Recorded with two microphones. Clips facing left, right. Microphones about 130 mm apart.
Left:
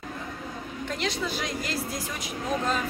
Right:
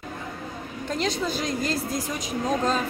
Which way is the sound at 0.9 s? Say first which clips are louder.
Right 4 dB; 35° right (ahead or behind).